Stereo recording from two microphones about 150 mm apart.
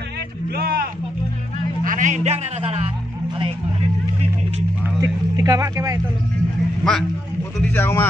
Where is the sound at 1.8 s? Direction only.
60° right (ahead or behind).